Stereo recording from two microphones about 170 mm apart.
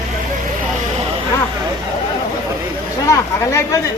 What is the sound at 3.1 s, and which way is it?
Speech, 15° left (ahead or behind).